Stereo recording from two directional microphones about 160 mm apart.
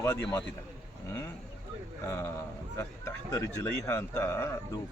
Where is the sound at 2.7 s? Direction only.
20° left (ahead or behind).